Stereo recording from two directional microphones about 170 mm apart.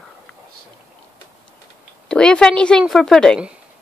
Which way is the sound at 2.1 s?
5° left (ahead or behind).